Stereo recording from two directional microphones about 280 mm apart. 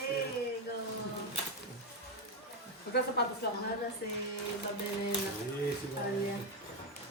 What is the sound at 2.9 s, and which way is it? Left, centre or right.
Speech, left.